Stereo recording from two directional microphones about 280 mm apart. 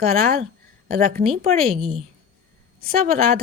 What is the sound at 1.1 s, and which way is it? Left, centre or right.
Speech, right.